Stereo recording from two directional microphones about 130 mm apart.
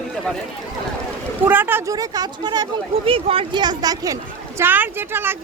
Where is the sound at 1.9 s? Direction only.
30° right (ahead or behind).